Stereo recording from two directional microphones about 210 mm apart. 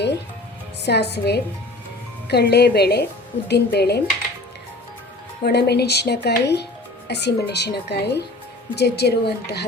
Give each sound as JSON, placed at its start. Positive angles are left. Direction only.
{"t": 0.9, "sound": "speech", "side_deg": 50}
{"t": 5.4, "sound": "speech", "side_deg": 50}